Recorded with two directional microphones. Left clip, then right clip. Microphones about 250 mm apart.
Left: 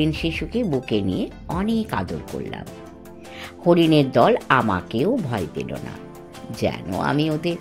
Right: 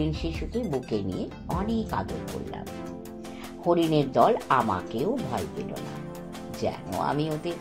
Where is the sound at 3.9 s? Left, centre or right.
Left.